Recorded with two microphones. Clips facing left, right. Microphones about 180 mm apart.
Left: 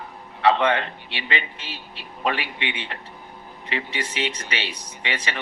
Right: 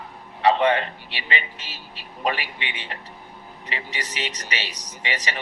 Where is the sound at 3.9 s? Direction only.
40° right (ahead or behind).